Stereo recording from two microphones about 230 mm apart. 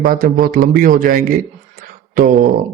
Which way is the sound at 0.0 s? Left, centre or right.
Right.